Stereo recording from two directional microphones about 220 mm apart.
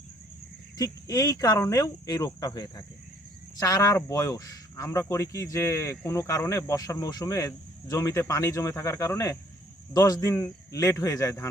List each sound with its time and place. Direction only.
0.8 s speech: 15° left (ahead or behind)